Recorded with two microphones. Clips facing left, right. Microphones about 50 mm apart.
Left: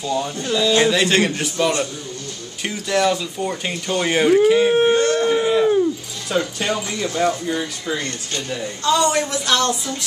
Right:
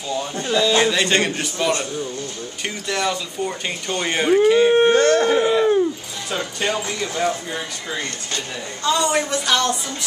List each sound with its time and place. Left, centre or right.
0.5 s speech: centre
4.9 s howl: right
5.5 s a sound: centre
6.3 s speech: centre